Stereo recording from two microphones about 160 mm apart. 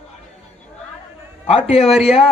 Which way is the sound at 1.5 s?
40° left (ahead or behind).